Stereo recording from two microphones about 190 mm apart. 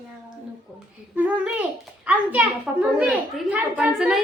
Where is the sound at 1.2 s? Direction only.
5° right (ahead or behind).